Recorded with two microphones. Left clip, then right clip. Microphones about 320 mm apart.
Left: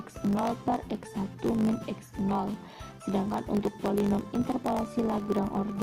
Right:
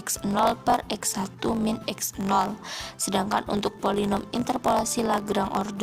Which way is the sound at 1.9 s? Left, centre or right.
Right.